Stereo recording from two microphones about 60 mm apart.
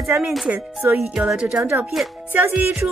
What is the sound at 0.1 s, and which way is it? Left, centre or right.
Speech, centre.